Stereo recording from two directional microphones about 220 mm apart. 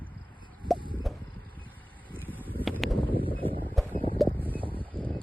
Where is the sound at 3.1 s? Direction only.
25° right (ahead or behind).